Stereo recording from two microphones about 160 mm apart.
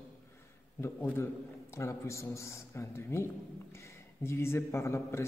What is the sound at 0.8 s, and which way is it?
A man's voice, 15° left (ahead or behind).